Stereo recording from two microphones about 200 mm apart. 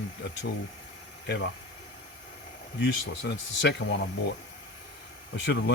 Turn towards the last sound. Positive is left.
turn(degrees=60)  # may be behind; listen again after turning